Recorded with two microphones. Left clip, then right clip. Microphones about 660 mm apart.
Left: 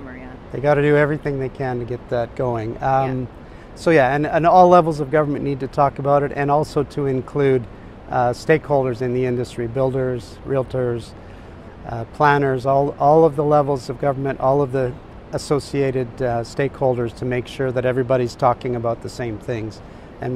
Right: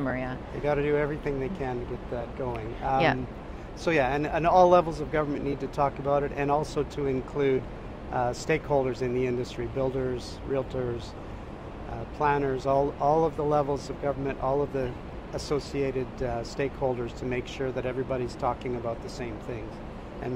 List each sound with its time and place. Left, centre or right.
0.7 s speech: left
12.2 s speech: left